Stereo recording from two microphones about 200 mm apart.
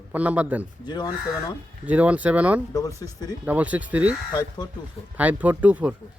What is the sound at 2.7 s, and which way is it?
Speech, 15° left (ahead or behind).